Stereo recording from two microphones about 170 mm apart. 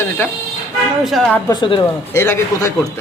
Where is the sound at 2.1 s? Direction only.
15° left (ahead or behind).